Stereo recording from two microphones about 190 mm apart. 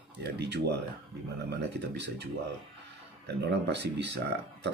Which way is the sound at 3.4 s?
65° right (ahead or behind).